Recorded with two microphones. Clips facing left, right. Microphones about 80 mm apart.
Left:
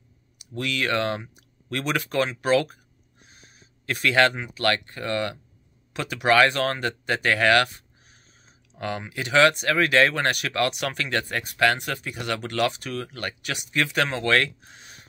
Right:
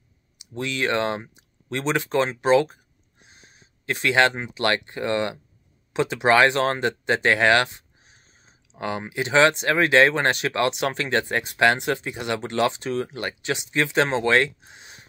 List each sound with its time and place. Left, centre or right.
0.4 s speech: right